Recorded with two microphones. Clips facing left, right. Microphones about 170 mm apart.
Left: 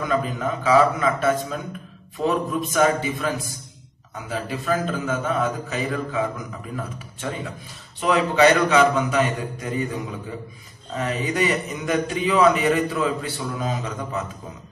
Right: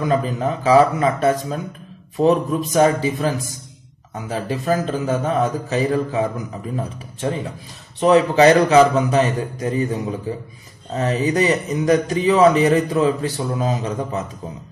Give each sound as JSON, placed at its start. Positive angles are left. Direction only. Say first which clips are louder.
{"t": 0.0, "sound": "a man's voice", "louder": "right 4 dB", "side_deg": -30}